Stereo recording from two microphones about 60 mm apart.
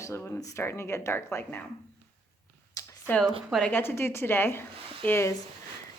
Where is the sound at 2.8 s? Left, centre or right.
Left.